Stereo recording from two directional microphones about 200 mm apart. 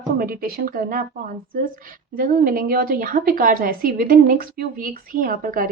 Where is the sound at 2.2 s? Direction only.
45° right (ahead or behind).